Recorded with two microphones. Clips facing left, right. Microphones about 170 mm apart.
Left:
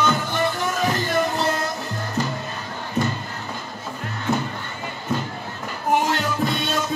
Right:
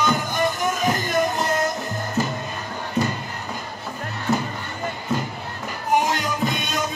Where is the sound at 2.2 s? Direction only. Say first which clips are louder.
Right 1 dB; 10° right (ahead or behind).